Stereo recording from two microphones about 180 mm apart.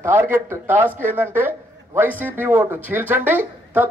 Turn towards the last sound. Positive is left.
turn(degrees=-10)  # may be behind; listen again after turning